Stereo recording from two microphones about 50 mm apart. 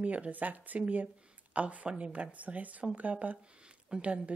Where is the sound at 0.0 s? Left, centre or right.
Right.